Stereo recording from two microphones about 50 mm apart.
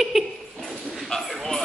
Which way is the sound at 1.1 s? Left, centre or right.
Centre.